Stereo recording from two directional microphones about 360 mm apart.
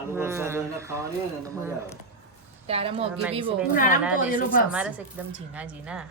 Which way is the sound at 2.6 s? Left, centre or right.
Centre.